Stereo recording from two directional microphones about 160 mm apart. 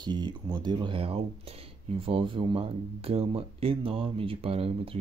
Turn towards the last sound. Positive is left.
turn(degrees=-35)  # may be behind; listen again after turning